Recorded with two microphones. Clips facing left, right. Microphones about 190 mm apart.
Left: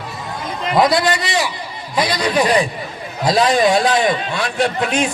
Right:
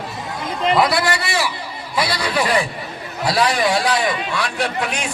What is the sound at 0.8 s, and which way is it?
A man's voice, 20° left (ahead or behind).